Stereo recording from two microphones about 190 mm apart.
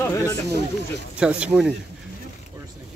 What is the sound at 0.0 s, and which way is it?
Speech, 15° left (ahead or behind).